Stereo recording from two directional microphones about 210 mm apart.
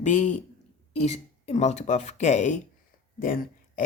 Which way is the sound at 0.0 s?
35° left (ahead or behind).